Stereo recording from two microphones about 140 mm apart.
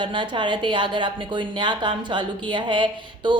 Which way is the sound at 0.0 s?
35° right (ahead or behind).